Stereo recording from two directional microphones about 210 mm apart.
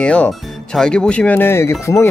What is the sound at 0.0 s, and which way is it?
Speech, 5° left (ahead or behind).